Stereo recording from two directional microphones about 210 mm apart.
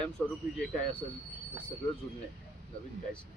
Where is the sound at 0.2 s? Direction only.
5° left (ahead or behind).